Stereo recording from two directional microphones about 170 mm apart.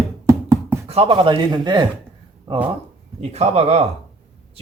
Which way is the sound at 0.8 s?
35° right (ahead or behind).